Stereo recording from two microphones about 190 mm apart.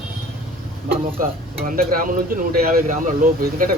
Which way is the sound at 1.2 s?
45° right (ahead or behind).